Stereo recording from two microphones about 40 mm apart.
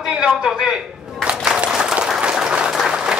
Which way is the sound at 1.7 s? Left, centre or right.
Centre.